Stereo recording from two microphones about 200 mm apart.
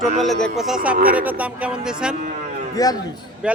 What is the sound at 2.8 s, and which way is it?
Speech, 15° left (ahead or behind).